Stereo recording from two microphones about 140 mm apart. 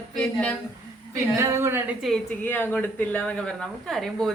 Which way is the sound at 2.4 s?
10° left (ahead or behind).